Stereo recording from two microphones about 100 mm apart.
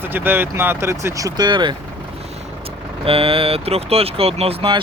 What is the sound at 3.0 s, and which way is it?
Speech, 65° right (ahead or behind).